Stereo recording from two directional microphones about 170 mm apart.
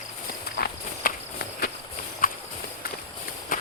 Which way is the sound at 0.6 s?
65° left (ahead or behind).